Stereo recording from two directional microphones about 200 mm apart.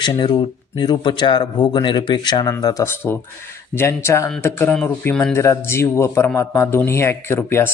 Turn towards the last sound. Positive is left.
turn(degrees=10)  # may be behind; listen again after turning